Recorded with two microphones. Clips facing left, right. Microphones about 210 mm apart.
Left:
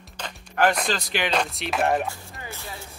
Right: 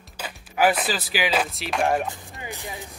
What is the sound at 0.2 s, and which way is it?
Speech, 5° right (ahead or behind).